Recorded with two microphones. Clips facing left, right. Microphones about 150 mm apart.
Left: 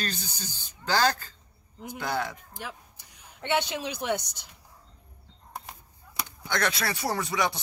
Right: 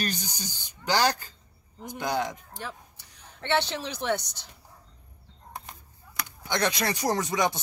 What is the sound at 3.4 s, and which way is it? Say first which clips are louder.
Speech: right 1 dB; 10° left (ahead or behind).